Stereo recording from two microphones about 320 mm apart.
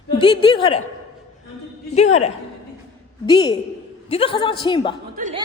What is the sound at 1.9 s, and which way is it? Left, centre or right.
A woman's voice, left.